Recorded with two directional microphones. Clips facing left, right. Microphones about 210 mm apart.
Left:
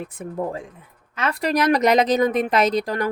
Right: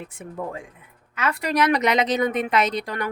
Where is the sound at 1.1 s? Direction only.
35° left (ahead or behind).